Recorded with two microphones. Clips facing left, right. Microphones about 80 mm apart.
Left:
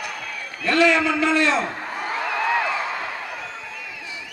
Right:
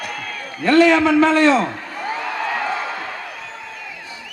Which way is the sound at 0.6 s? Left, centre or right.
Right.